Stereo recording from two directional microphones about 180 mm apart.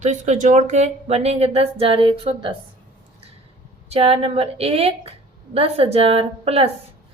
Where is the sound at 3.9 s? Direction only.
30° right (ahead or behind).